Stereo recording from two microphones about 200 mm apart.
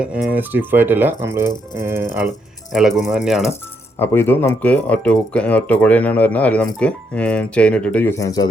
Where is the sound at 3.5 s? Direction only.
10° left (ahead or behind).